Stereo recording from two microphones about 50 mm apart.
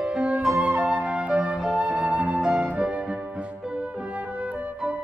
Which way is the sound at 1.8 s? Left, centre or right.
Right.